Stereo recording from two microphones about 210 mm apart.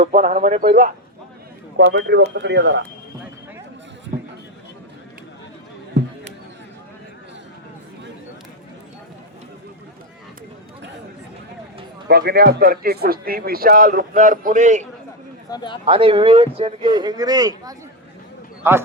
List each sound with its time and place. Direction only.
0.0 s speech: 35° right (ahead or behind)
1.7 s speech: 55° right (ahead or behind)
12.0 s speech: 50° right (ahead or behind)
15.4 s a man's voice: 20° left (ahead or behind)
15.9 s a man's voice: 25° right (ahead or behind); by 18.8 s 10° right (ahead or behind)